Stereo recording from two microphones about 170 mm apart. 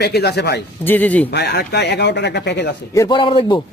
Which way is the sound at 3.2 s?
30° left (ahead or behind).